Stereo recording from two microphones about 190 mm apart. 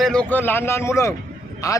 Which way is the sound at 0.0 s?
5° left (ahead or behind).